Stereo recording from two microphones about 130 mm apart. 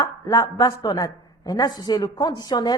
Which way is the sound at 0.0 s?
30° left (ahead or behind).